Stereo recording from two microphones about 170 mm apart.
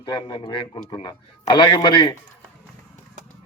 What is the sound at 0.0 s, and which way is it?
A man's voice, 25° left (ahead or behind).